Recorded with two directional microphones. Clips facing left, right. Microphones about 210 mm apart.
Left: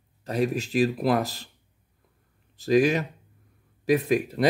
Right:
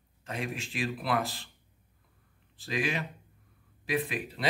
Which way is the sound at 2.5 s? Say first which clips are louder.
Left 12 dB; 40° left (ahead or behind).